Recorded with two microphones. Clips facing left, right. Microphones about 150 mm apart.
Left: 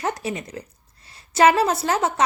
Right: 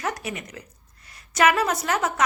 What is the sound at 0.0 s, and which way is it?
A woman's voice, 30° left (ahead or behind).